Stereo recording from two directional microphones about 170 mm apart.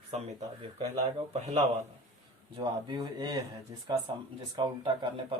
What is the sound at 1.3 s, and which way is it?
Speech, 40° right (ahead or behind).